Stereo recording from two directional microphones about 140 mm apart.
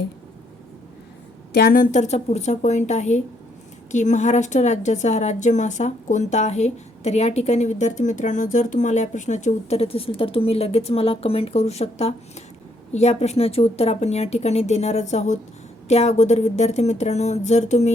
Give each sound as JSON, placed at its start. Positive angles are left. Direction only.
{"t": 1.6, "sound": "a woman's voice", "side_deg": 85}